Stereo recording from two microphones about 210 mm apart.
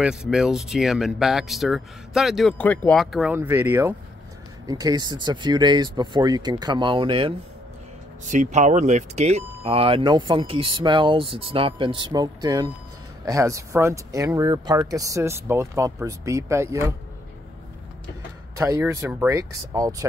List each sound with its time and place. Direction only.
0.0 s speech: 5° right (ahead or behind); by 7.3 s 25° right (ahead or behind)
8.3 s speech: 35° right (ahead or behind); by 16.9 s 15° right (ahead or behind)
18.6 s speech: 15° right (ahead or behind)